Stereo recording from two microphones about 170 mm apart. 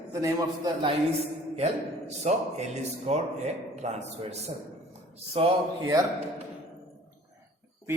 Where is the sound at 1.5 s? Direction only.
40° right (ahead or behind).